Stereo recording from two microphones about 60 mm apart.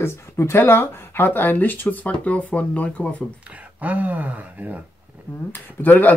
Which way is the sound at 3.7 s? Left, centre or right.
Right.